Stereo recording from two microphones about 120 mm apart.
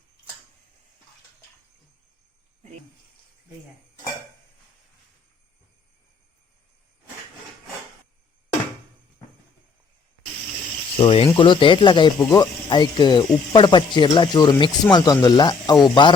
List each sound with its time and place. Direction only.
10.9 s speech: 50° left (ahead or behind)